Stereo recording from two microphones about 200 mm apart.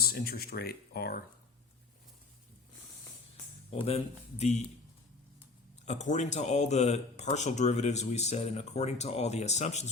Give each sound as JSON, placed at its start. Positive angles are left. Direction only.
{"t": 0.0, "sound": "speech", "side_deg": 50}
{"t": 3.7, "sound": "speech", "side_deg": 30}
{"t": 5.8, "sound": "speech", "side_deg": 35}